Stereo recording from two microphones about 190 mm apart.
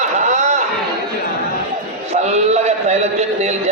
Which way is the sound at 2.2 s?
35° right (ahead or behind).